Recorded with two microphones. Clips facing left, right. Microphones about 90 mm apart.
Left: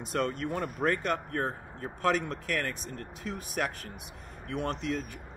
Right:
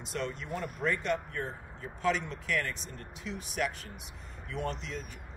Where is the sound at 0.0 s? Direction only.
50° left (ahead or behind).